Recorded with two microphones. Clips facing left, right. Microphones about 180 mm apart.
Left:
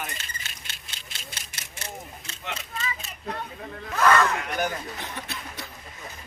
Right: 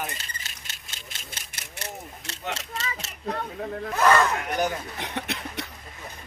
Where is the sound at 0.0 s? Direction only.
35° right (ahead or behind); by 2.4 s 70° right (ahead or behind).